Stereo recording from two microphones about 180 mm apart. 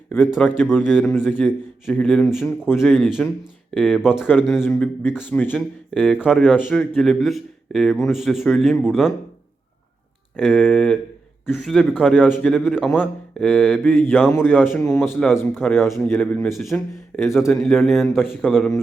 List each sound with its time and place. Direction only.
0.3 s mantra: 10° left (ahead or behind)
1.3 s a man's voice: 10° left (ahead or behind)
4.6 s mantra: 10° left (ahead or behind)
5.3 s a man's voice: 10° left (ahead or behind)
10.3 s a man's voice: centre (ahead or behind)
13.5 s mantra: 10° left (ahead or behind)
15.1 s a man's voice: centre (ahead or behind)
17.1 s mantra: 10° left (ahead or behind)
17.6 s a man's voice: centre (ahead or behind)